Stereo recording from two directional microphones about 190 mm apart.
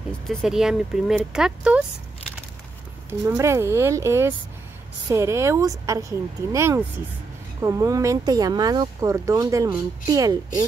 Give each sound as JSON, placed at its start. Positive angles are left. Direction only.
{"t": 0.3, "sound": "speech", "side_deg": 0}
{"t": 3.1, "sound": "speech", "side_deg": -15}